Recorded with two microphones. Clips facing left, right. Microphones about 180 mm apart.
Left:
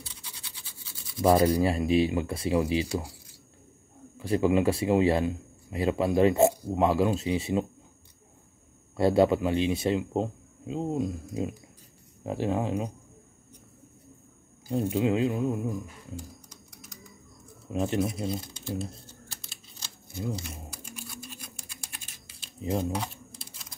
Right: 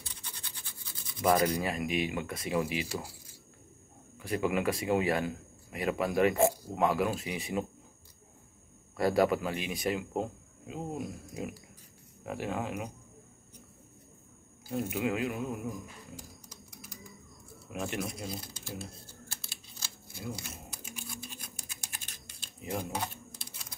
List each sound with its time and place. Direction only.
1.2 s speech: 30° left (ahead or behind)
4.2 s speech: 30° left (ahead or behind)
8.9 s speech: 25° left (ahead or behind)
14.8 s speech: 30° left (ahead or behind)
17.6 s speech: 30° left (ahead or behind)
19.4 s a sound: 5° right (ahead or behind)
22.6 s speech: 25° left (ahead or behind)